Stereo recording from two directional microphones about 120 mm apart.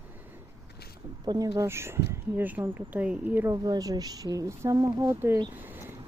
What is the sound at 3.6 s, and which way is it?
Speech, 30° right (ahead or behind).